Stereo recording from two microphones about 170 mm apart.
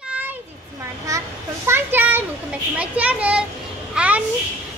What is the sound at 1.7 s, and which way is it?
Children playing, 10° right (ahead or behind).